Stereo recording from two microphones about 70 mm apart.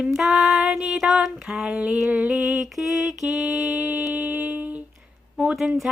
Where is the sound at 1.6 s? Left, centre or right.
Centre.